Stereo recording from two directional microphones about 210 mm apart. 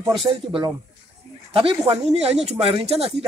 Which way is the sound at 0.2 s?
25° right (ahead or behind).